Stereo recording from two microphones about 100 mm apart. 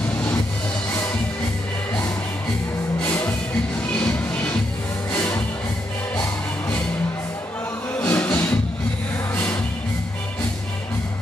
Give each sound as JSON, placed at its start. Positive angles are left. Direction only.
{"t": 3.0, "sound": "music", "side_deg": 20}
{"t": 8.1, "sound": "music", "side_deg": 15}